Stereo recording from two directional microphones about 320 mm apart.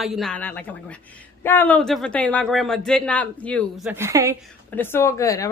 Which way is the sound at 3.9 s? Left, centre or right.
Centre.